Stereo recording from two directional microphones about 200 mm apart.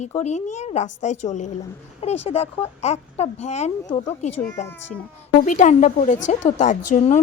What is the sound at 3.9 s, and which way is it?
Speech, 20° left (ahead or behind).